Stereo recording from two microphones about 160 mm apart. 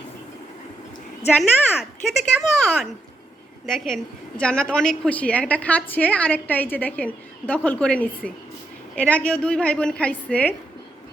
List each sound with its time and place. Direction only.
1.4 s a woman's voice: centre (ahead or behind)